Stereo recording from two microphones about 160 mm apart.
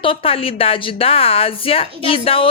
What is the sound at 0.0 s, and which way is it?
A woman's voice, 35° left (ahead or behind).